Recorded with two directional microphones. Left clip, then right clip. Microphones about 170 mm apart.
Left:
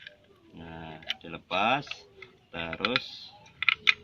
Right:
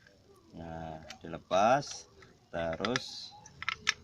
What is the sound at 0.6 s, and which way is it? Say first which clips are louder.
Speech: even; 25° right (ahead or behind).